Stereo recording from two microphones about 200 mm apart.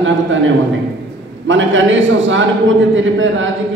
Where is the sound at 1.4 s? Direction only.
70° right (ahead or behind).